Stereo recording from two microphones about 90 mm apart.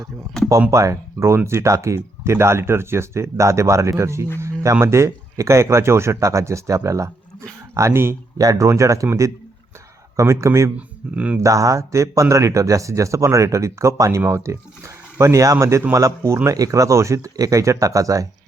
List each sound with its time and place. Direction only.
0.7 s speech: 35° right (ahead or behind)
8.4 s speech: 40° right (ahead or behind)
10.8 s speech: 15° right (ahead or behind)
11.3 s speech: 35° right (ahead or behind)